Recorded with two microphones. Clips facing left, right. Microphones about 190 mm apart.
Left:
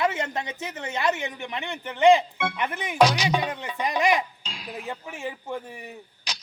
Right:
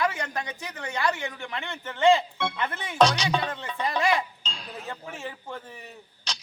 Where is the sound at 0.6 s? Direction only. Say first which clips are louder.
Left 2 dB; 20° left (ahead or behind).